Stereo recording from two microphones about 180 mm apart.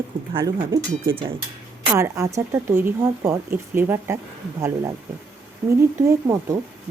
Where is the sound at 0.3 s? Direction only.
20° right (ahead or behind).